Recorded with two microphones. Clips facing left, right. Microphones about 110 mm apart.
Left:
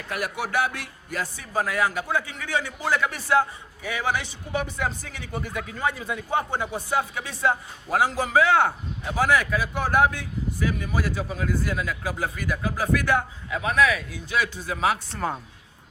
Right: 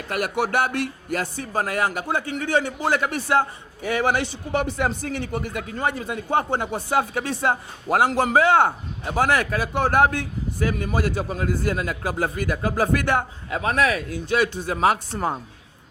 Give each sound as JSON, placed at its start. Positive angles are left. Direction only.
{"t": 0.1, "sound": "speech", "side_deg": -65}